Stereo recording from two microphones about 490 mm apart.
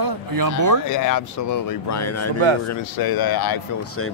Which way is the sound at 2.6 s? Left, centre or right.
Left.